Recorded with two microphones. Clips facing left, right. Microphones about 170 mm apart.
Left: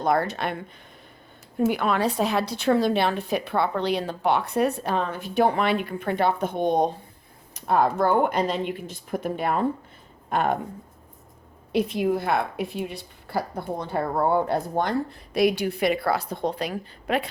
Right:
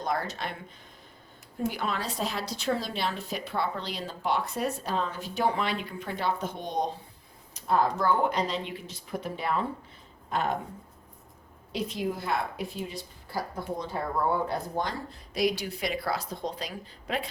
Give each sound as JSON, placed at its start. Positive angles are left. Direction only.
{"t": 0.0, "sound": "a woman's voice", "side_deg": 60}
{"t": 1.5, "sound": "a woman's voice", "side_deg": 65}
{"t": 11.7, "sound": "a woman's voice", "side_deg": 60}